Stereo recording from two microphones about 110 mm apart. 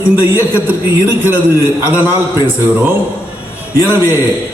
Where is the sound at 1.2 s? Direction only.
20° right (ahead or behind).